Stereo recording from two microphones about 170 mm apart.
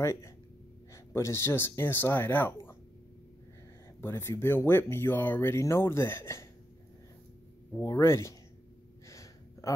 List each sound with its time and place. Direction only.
0.0 s speech: 15° left (ahead or behind)
4.0 s speech: 15° left (ahead or behind)
7.7 s speech: 15° left (ahead or behind)
9.0 s gasp: 20° left (ahead or behind)